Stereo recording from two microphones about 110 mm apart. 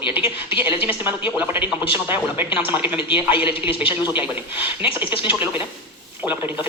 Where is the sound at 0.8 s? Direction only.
20° right (ahead or behind).